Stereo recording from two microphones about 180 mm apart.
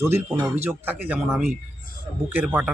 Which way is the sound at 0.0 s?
10° right (ahead or behind).